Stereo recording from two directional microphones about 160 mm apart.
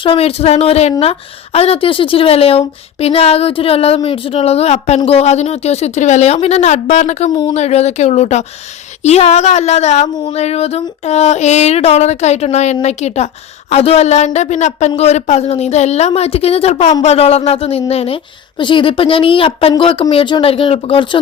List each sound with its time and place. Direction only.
0.0 s a woman's voice: 35° left (ahead or behind)